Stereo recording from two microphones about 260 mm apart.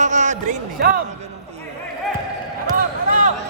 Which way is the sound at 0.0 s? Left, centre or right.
Right.